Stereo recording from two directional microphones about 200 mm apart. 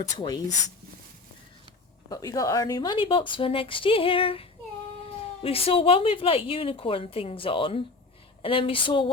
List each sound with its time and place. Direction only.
0.2 s a woman's voice: 20° left (ahead or behind)
2.0 s a woman's voice: 20° left (ahead or behind)